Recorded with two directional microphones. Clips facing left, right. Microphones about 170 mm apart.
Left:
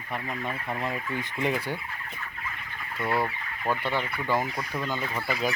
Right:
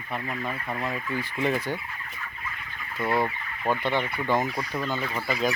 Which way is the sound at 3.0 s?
15° right (ahead or behind).